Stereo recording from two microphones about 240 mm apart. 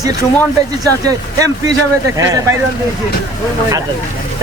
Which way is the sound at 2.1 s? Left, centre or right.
Centre.